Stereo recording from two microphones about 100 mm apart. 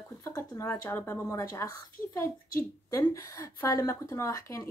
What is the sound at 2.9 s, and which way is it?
Speech, 30° left (ahead or behind).